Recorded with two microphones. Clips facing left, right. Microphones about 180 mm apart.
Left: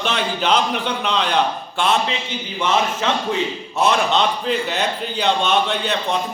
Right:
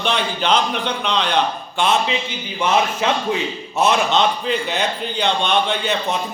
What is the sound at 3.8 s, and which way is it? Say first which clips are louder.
A man's voice: right 1 dB; centre (ahead or behind).